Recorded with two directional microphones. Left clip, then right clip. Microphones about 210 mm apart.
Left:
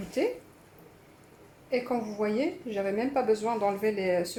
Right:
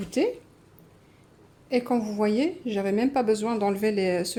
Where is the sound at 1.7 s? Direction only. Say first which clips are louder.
Right 4 dB; 45° right (ahead or behind).